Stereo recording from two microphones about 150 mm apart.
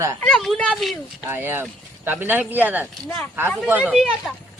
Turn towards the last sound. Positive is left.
turn(degrees=0)  # may be behind; listen again after turning